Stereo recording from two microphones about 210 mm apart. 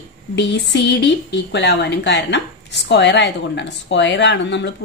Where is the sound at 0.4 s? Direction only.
55° left (ahead or behind).